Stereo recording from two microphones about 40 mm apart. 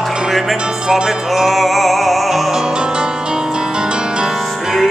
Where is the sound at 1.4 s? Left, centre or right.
Centre.